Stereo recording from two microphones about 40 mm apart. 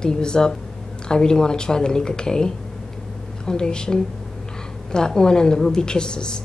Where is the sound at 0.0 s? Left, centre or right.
Centre.